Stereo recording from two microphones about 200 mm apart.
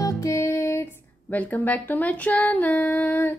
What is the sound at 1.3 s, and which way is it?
A woman's voice, 10° left (ahead or behind).